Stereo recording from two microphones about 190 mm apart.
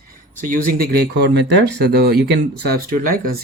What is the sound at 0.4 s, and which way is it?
Speech, 45° right (ahead or behind).